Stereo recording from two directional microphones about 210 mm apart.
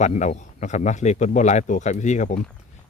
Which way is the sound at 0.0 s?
35° left (ahead or behind).